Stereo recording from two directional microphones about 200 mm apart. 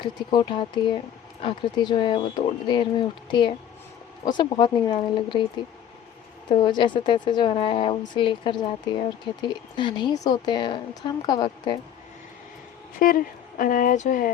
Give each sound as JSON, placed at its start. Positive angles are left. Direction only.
{"t": 0.0, "sound": "speech", "side_deg": 20}
{"t": 6.6, "sound": "speech", "side_deg": 25}
{"t": 13.0, "sound": "speech", "side_deg": 45}